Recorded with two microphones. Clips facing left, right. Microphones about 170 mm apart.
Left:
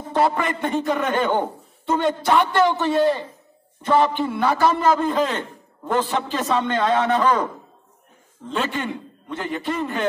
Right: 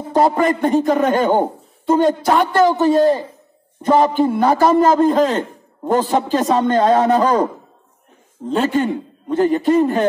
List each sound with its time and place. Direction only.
0.1 s a man's voice: 40° right (ahead or behind)
8.5 s a man's voice: 40° right (ahead or behind)